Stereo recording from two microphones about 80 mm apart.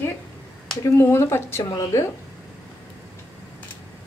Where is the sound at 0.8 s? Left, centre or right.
Left.